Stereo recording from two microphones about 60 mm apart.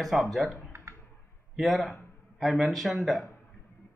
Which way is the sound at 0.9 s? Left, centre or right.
Right.